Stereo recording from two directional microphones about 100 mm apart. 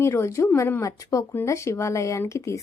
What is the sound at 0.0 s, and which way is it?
Speech, 25° left (ahead or behind).